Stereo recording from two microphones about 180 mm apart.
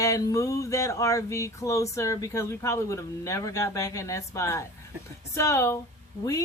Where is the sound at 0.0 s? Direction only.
20° left (ahead or behind).